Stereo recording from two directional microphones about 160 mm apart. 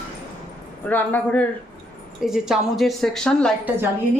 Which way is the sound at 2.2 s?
5° right (ahead or behind).